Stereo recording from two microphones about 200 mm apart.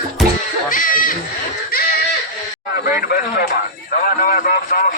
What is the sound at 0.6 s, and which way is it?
Music, 45° left (ahead or behind).